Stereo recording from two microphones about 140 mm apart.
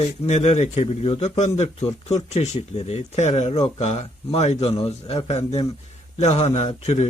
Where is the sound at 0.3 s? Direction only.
55° left (ahead or behind).